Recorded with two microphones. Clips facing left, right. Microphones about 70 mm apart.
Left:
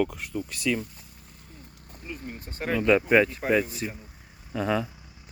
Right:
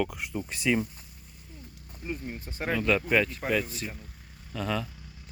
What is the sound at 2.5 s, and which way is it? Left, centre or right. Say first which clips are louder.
Speech: left 1 dB; centre.